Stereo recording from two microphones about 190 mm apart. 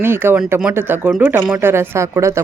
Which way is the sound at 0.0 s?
10° right (ahead or behind).